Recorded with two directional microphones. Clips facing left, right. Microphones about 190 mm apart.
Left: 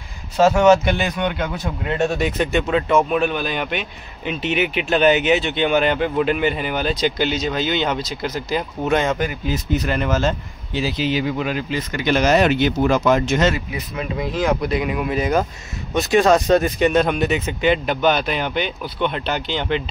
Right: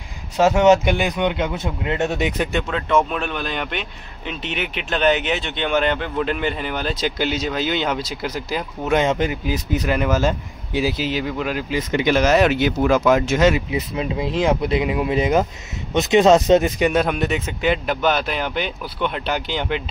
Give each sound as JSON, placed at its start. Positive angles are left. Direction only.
{"t": 0.4, "sound": "speech", "side_deg": -20}
{"t": 2.7, "sound": "speech", "side_deg": 10}
{"t": 8.9, "sound": "speech", "side_deg": -20}
{"t": 9.5, "sound": "speech", "side_deg": -10}
{"t": 11.7, "sound": "speech", "side_deg": -15}
{"t": 12.2, "sound": "speech", "side_deg": 0}
{"t": 13.7, "sound": "speech", "side_deg": -25}
{"t": 16.9, "sound": "speech", "side_deg": -5}